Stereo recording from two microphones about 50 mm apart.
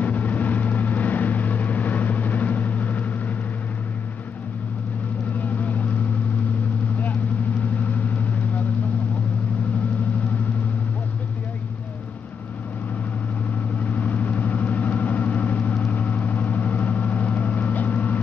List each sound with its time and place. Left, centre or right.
0.0 s vehicle: left
5.4 s vehicle: left
7.7 s vehicle: left
13.7 s vehicle: left